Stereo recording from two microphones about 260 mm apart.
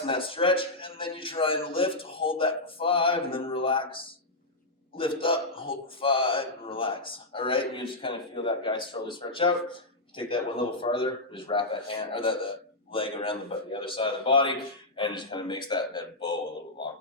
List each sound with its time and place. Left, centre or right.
0.0 s a man's voice: left